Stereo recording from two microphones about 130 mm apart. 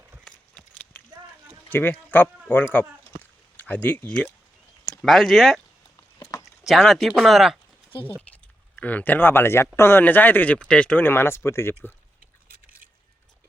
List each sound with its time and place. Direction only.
0.3 s horse: 10° left (ahead or behind)
1.7 s speech: 15° left (ahead or behind)
3.2 s a sound: 15° left (ahead or behind)
5.0 s speech: centre (ahead or behind)
6.7 s speech: centre (ahead or behind)
8.3 s speech: 10° left (ahead or behind)